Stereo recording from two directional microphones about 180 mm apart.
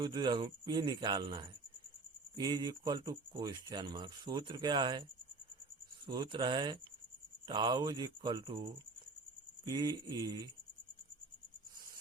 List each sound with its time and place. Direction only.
0.0 s speech: 25° right (ahead or behind)
6.1 s speech: 25° right (ahead or behind)
9.6 s speech: 25° right (ahead or behind)